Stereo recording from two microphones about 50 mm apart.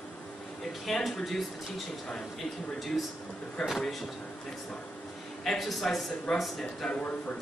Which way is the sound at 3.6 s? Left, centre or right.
Centre.